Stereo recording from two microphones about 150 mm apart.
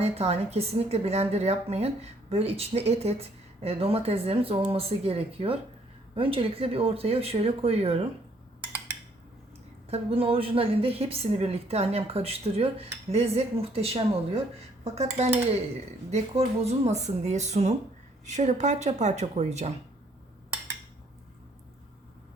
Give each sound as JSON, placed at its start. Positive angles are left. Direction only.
{"t": 0.0, "sound": "speech", "side_deg": -45}
{"t": 9.9, "sound": "speech", "side_deg": -40}